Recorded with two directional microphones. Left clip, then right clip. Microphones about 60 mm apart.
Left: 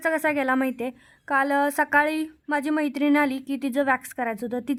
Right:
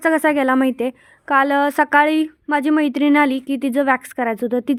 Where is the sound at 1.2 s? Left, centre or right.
Right.